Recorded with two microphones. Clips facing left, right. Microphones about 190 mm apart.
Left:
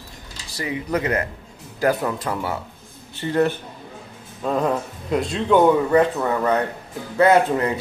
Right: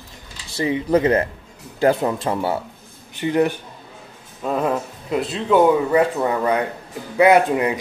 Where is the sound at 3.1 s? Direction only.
15° right (ahead or behind).